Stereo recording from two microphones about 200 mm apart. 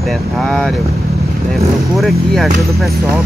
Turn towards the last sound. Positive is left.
turn(degrees=0)  # may be behind; listen again after turning